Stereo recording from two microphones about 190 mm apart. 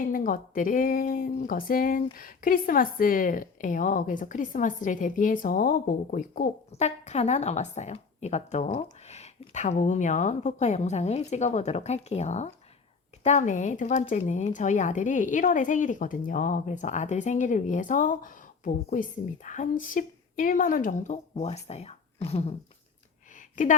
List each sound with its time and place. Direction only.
0.1 s speech: 45° left (ahead or behind)